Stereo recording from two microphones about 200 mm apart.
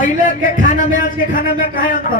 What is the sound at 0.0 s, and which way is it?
Speech, 40° left (ahead or behind).